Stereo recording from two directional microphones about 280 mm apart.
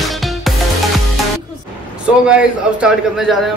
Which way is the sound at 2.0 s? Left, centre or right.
Centre.